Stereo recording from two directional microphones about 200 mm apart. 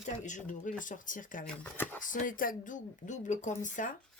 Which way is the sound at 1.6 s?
10° left (ahead or behind).